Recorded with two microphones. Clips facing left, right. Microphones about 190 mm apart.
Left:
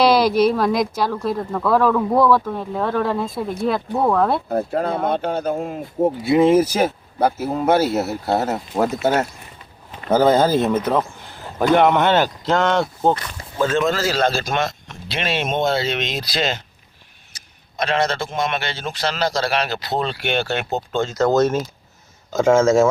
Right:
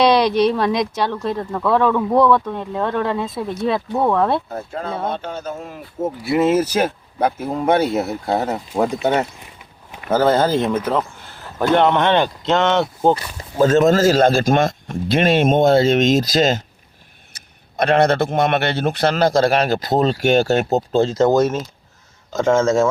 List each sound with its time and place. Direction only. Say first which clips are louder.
0.0 s speech: even; 5° left (ahead or behind)
4.4 s speech: left 7 dB; 35° left (ahead or behind)
4.9 s speech: left 4 dB; 55° left (ahead or behind)
6.2 s speech: left 1 dB; 15° left (ahead or behind); by 12.9 s centre (ahead or behind)
13.0 s speech: right 2 dB; 10° right (ahead or behind)
13.6 s a man's voice: right 6 dB; 45° right (ahead or behind)
17.3 s a man's voice: right 5 dB; 55° right (ahead or behind); by 21.2 s 30° right (ahead or behind)
21.2 s speech: right 1 dB; 5° right (ahead or behind)